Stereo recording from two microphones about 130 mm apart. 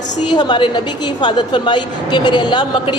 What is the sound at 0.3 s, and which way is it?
A woman's voice, 35° left (ahead or behind).